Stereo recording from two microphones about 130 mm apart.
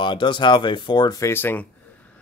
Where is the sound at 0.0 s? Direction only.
40° left (ahead or behind).